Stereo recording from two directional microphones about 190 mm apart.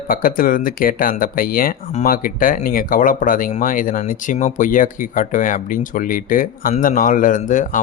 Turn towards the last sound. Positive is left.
turn(degrees=40)  # may be behind; listen again after turning